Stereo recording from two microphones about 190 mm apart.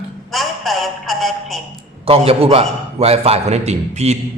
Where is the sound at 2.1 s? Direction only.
30° right (ahead or behind).